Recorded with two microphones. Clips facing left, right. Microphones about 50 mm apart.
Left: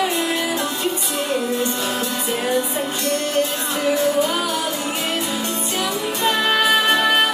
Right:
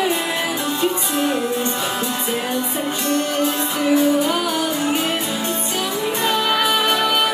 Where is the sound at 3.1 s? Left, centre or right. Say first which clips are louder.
Right 2 dB; right.